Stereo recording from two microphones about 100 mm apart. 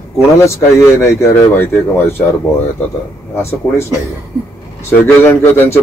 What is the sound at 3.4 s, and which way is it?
Speech, 25° left (ahead or behind).